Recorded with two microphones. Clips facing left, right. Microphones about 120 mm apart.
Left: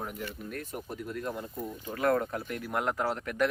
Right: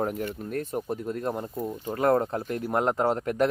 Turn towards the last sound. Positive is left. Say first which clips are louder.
# right 7 dB
turn(degrees=-30)  # may be behind; listen again after turning